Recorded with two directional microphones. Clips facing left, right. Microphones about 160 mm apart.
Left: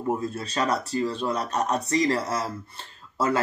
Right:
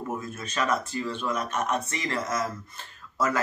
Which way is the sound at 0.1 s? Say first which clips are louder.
Left 5 dB; 30° left (ahead or behind).